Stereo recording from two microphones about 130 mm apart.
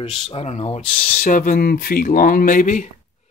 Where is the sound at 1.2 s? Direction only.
90° left.